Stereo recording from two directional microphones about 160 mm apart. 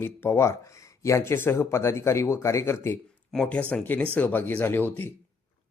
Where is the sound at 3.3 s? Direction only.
5° left (ahead or behind).